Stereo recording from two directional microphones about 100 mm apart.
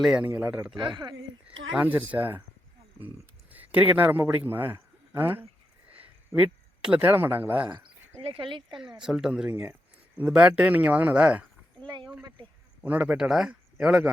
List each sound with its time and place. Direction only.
0.0 s speech: 10° right (ahead or behind)
0.8 s speech: 45° right (ahead or behind)
1.5 s speech: 15° right (ahead or behind)
3.5 s a man's voice: 15° right (ahead or behind)
8.2 s speech: 60° right (ahead or behind)
9.0 s speech: 5° right (ahead or behind)
11.9 s speech: 50° right (ahead or behind)
12.8 s speech: 15° right (ahead or behind)